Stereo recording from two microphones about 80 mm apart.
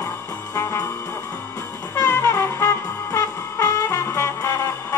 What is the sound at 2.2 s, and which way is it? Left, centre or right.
Brass instrument, left.